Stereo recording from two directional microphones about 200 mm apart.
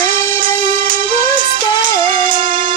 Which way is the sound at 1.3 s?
45° right (ahead or behind).